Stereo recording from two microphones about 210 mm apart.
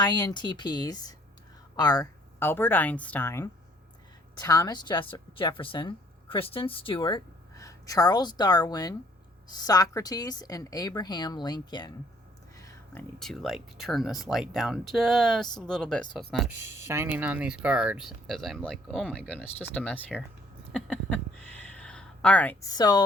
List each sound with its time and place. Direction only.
0.0 s a woman's voice: 20° left (ahead or behind)
20.7 s a sound: 5° left (ahead or behind)
22.7 s a woman's voice: 20° left (ahead or behind)